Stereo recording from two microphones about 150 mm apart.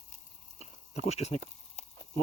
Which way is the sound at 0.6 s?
45° left (ahead or behind).